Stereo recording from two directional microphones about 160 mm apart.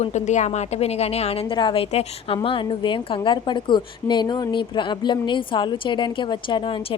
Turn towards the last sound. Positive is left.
turn(degrees=30)  # may be behind; listen again after turning